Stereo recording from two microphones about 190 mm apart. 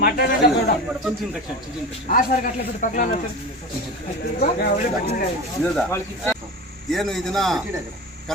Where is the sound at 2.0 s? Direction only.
45° left (ahead or behind).